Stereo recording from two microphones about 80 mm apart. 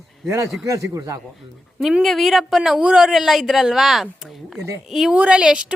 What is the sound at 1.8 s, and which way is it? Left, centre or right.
Speech, centre.